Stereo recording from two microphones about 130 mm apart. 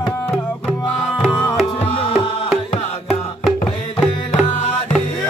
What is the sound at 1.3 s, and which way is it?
Music, 20° left (ahead or behind).